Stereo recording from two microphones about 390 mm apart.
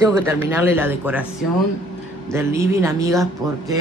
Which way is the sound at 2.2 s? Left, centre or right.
Centre.